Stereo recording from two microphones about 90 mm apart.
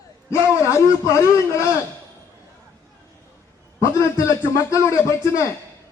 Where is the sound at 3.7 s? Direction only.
35° left (ahead or behind).